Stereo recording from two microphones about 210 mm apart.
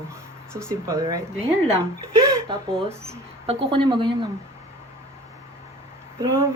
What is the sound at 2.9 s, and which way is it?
Speech, 15° right (ahead or behind).